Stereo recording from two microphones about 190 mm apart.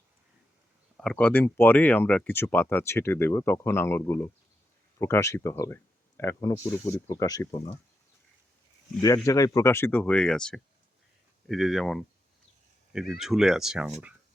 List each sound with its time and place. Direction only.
0.9 s speech: 5° left (ahead or behind)
7.5 s speech: 30° left (ahead or behind)
9.0 s speech: 20° left (ahead or behind); by 13.9 s 5° right (ahead or behind)